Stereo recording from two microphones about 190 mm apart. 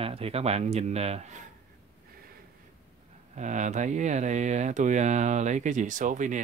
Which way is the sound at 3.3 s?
40° right (ahead or behind).